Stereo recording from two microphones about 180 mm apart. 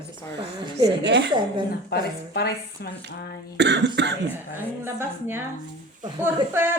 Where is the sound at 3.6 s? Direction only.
70° right (ahead or behind).